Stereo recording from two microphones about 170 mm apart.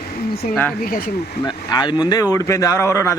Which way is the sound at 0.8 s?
55° left (ahead or behind).